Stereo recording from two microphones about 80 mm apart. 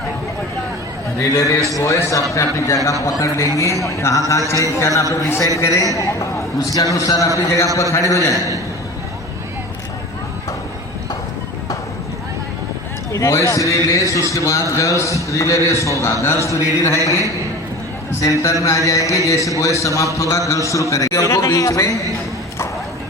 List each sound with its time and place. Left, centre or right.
1.2 s a man's voice: left
13.1 s a man's voice: left